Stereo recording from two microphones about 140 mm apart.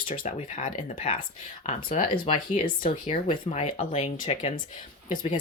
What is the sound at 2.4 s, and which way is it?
Speech, 70° left (ahead or behind).